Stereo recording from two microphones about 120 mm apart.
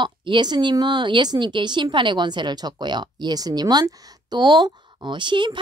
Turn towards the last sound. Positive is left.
turn(degrees=-40)  # may be behind; listen again after turning